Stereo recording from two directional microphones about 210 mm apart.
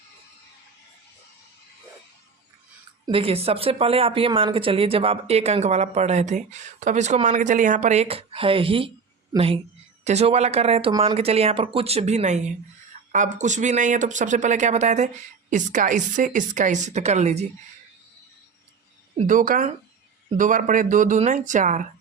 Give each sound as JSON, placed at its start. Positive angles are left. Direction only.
{"t": 3.1, "sound": "a woman's voice", "side_deg": -25}
{"t": 19.1, "sound": "speech", "side_deg": -40}